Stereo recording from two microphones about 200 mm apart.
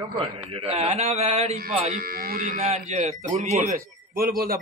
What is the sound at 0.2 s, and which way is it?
Speech, 30° right (ahead or behind).